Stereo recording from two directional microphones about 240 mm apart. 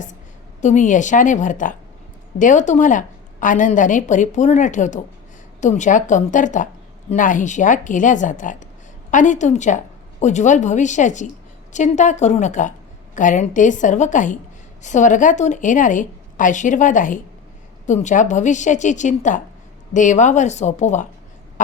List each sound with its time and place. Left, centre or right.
0.6 s a woman's voice: left